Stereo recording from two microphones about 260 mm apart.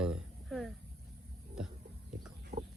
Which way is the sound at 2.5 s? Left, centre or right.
Right.